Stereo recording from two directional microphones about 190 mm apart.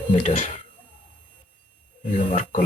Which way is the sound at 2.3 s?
40° left (ahead or behind).